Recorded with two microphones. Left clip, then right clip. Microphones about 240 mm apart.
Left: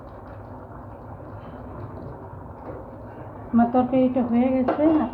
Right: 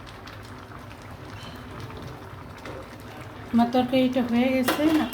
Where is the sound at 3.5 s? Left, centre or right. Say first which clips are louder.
Left 2 dB; right.